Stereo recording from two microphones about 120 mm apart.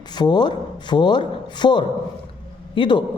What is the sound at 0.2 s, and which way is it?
Speech, 40° left (ahead or behind).